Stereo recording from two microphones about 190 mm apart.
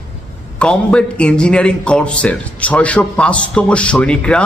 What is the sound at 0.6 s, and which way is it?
A man's voice, 5° left (ahead or behind).